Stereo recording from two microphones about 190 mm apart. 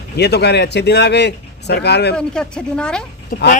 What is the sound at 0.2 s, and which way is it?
Speech, 60° left (ahead or behind).